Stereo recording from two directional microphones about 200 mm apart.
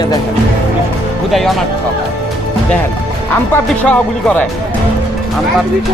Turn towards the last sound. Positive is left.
turn(degrees=5)  # may be behind; listen again after turning